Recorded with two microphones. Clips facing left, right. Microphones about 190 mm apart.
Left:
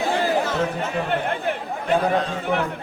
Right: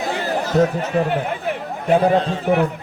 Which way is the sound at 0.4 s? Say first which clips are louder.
Right 6 dB; 40° right (ahead or behind).